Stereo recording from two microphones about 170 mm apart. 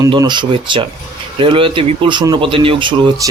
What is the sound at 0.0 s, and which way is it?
Speech, 25° right (ahead or behind).